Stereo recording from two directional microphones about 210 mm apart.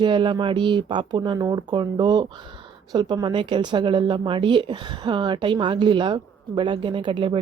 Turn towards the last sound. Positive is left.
turn(degrees=-20)  # may be behind; listen again after turning